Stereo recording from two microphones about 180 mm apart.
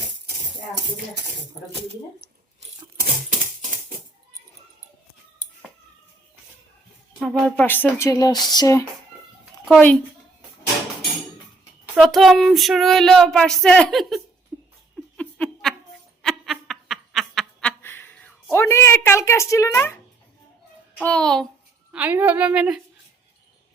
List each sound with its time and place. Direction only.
3.0 s typewriter: 45° right (ahead or behind)
7.2 s speech: centre (ahead or behind); by 8.4 s 20° left (ahead or behind)
8.4 s a sound: 20° left (ahead or behind)
11.9 s child singing: centre (ahead or behind)
15.1 s a sound: 5° left (ahead or behind)
21.0 s child singing: 5° left (ahead or behind)
21.9 s a woman's voice: 10° right (ahead or behind)